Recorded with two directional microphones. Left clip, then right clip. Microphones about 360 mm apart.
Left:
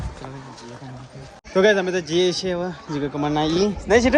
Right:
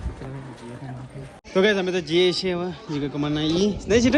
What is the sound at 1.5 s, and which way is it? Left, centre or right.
A man's voice, centre.